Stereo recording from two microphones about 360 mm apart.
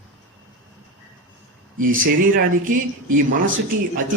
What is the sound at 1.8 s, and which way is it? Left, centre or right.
A man's voice, right.